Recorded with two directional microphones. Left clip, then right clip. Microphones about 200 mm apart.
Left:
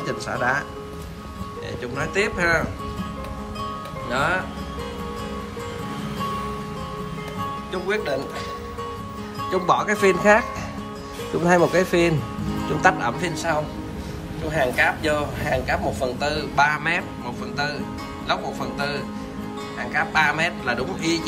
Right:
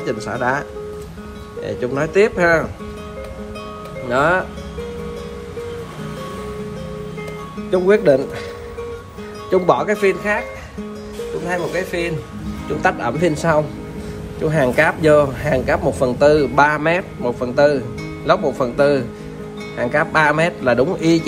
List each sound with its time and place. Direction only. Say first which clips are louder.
0.0 s speech: right 3 dB; centre (ahead or behind)
1.8 s a man's voice: right 8 dB; 10° right (ahead or behind)
4.1 s a man's voice: right 7 dB; 10° right (ahead or behind)
7.7 s speech: right 13 dB; 20° right (ahead or behind)
9.5 s speech: right 5 dB; 5° right (ahead or behind)
11.4 s speech: left 5 dB; 15° left (ahead or behind)
12.8 s speech: right 3 dB; 5° right (ahead or behind)
13.3 s a man's voice: right 7 dB; 15° right (ahead or behind)